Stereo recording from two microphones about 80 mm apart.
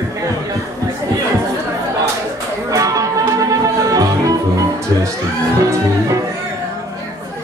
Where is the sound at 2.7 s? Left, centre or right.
Right.